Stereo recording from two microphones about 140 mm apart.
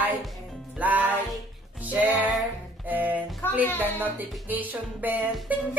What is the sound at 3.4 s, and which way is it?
Music, 15° left (ahead or behind).